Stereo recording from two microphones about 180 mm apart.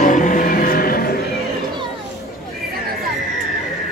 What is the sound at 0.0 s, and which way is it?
Music, 45° left (ahead or behind).